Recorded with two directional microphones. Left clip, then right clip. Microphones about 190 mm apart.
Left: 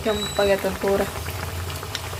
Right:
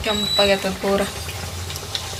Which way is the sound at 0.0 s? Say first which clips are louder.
Right 3 dB; 25° left (ahead or behind).